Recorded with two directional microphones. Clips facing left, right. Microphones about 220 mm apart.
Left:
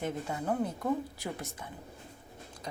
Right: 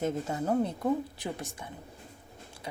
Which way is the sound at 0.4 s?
25° right (ahead or behind).